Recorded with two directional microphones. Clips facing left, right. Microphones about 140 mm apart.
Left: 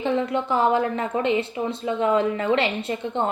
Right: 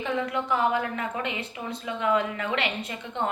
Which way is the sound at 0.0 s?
30° left (ahead or behind).